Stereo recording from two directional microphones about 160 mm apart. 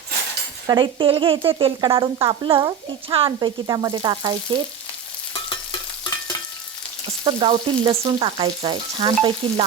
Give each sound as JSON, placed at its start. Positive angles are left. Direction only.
{"t": 0.7, "sound": "speech", "side_deg": -30}
{"t": 7.3, "sound": "speech", "side_deg": -30}